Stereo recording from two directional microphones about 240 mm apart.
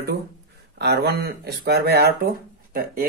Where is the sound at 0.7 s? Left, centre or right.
Right.